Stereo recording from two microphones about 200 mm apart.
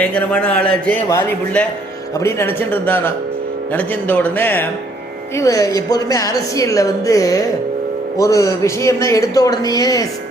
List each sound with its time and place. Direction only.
0.0 s a woman's voice: 5° left (ahead or behind)